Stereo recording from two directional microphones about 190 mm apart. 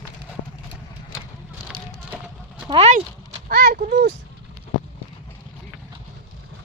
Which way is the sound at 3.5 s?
50° right (ahead or behind).